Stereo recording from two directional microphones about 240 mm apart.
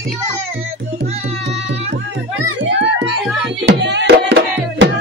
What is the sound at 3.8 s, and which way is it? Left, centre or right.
Music, right.